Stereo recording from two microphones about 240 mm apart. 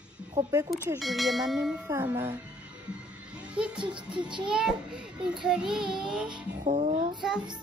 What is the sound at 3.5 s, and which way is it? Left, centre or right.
A child's voice, centre.